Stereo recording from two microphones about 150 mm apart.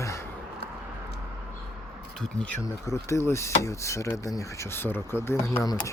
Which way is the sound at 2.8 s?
20° left (ahead or behind).